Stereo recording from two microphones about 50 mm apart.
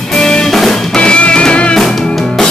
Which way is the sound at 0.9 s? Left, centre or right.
Centre.